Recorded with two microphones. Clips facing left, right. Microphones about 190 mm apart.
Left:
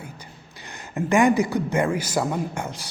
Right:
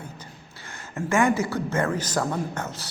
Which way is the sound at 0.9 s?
15° left (ahead or behind).